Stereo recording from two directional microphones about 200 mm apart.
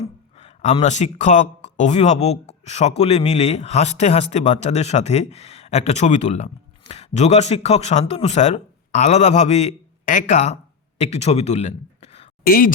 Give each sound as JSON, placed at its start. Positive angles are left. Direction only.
{"t": 0.3, "sound": "a man's voice", "side_deg": 35}
{"t": 12.5, "sound": "speech", "side_deg": 45}